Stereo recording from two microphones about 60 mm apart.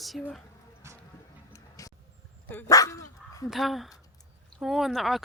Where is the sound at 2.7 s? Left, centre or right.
Left.